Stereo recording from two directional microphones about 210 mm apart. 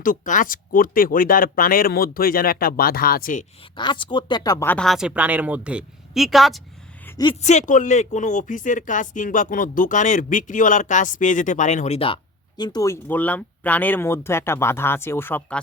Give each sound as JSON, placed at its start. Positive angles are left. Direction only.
{"t": 0.0, "sound": "speech", "side_deg": 40}
{"t": 3.8, "sound": "speech", "side_deg": 20}
{"t": 7.4, "sound": "speech", "side_deg": 35}